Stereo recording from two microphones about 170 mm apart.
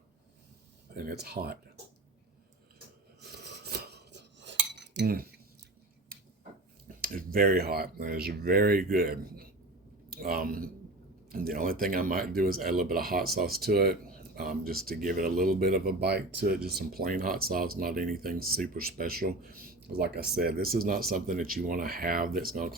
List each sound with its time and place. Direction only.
0.9 s speech: 65° right (ahead or behind)
3.2 s cutlery: 75° right (ahead or behind)
6.1 s a sound: 60° right (ahead or behind)
6.8 s speech: 55° right (ahead or behind); by 16.2 s 75° right (ahead or behind)
16.6 s speech: 65° right (ahead or behind)